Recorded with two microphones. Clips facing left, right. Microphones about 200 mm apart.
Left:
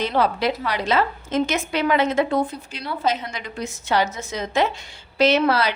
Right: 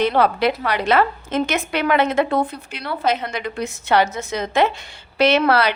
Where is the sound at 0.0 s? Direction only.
60° right (ahead or behind).